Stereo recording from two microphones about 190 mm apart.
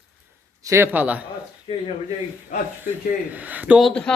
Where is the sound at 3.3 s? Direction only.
10° right (ahead or behind).